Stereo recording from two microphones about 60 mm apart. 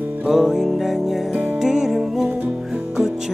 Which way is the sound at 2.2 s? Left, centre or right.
Right.